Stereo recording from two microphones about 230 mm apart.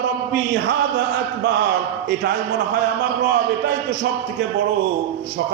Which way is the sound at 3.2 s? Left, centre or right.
Right.